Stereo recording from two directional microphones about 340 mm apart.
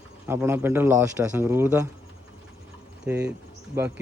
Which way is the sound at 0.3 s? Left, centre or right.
Centre.